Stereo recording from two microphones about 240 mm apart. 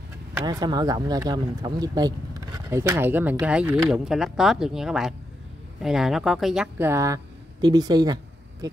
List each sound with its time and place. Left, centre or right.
0.4 s speech: centre